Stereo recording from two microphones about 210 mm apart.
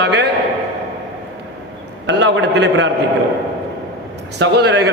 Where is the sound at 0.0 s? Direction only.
55° right (ahead or behind).